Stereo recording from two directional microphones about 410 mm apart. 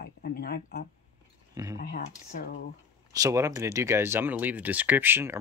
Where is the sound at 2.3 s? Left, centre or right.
Left.